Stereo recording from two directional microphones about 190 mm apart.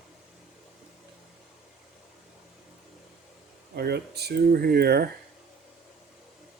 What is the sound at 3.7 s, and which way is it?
Speech, 55° right (ahead or behind).